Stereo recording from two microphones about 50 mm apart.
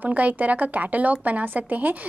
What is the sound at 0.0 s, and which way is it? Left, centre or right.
Speech, right.